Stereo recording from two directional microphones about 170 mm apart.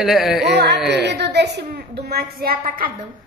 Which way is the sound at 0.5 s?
75° right (ahead or behind).